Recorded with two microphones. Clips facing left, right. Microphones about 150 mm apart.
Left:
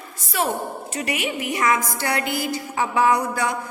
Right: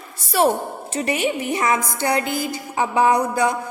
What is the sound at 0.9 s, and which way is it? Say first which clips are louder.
Music: right 6 dB; 30° right (ahead or behind).